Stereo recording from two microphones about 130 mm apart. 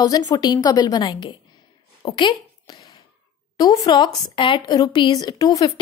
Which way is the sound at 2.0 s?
35° left (ahead or behind).